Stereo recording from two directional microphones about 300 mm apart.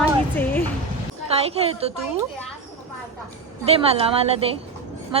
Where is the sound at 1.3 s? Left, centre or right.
Centre.